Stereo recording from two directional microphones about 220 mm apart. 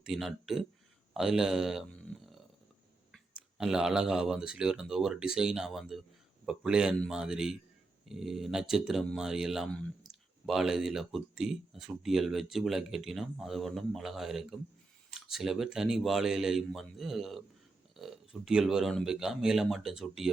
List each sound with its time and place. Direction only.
0.0 s speech: centre (ahead or behind)
3.3 s speech: 5° right (ahead or behind)